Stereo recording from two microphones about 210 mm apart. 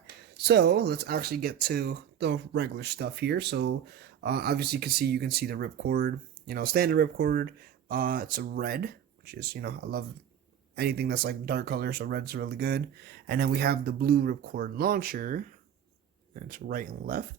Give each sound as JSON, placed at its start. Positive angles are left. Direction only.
{"t": 0.4, "sound": "speech", "side_deg": -55}